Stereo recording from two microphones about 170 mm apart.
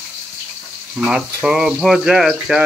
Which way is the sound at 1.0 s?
5° right (ahead or behind).